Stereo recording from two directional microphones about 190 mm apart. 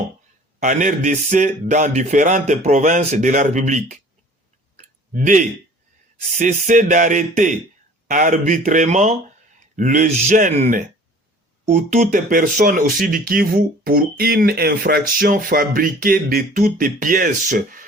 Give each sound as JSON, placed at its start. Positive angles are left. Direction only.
{"t": 0.6, "sound": "speech", "side_deg": -40}
{"t": 4.8, "sound": "clicking", "side_deg": -40}
{"t": 6.3, "sound": "speech", "side_deg": -40}